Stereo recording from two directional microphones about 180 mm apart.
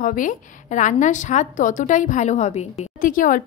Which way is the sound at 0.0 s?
45° left (ahead or behind).